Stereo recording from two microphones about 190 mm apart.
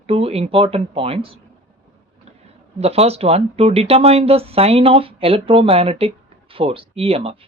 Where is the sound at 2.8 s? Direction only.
30° right (ahead or behind).